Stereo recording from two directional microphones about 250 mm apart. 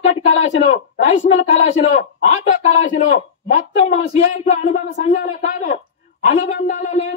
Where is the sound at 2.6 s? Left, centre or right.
Left.